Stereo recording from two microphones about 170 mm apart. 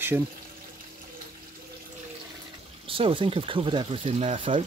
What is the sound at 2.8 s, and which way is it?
Speech, 30° right (ahead or behind).